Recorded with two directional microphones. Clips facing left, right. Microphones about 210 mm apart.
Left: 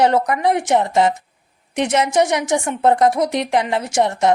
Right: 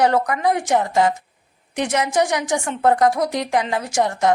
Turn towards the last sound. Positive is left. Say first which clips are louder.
# left 2 dB
turn(degrees=25)  # may be behind; listen again after turning